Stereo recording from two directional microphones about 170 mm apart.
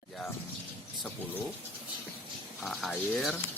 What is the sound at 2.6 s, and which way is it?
Speech, centre (ahead or behind).